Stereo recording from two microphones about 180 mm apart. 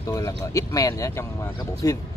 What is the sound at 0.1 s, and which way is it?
Speech, 20° left (ahead or behind).